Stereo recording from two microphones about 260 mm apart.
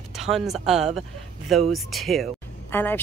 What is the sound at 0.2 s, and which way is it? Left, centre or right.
A woman's voice, centre.